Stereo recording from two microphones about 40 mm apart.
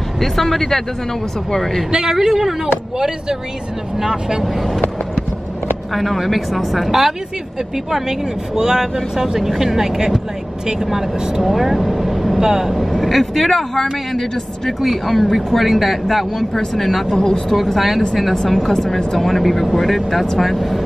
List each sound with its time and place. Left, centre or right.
0.2 s speech: centre
2.0 s speech: centre
5.9 s speech: centre
8.5 s speech: centre
11.4 s speech: centre
13.0 s speech: centre
17.2 s speech: centre
17.6 s speech: centre